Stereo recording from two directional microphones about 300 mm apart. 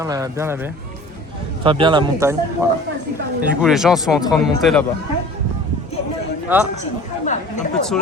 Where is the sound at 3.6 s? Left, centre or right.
Centre.